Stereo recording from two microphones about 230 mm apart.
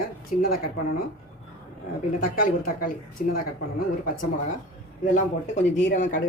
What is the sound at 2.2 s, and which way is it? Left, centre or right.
Speech, left.